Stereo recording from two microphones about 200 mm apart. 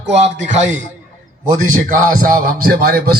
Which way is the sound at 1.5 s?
40° right (ahead or behind).